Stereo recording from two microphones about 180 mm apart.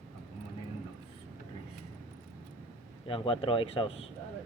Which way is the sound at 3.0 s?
30° left (ahead or behind).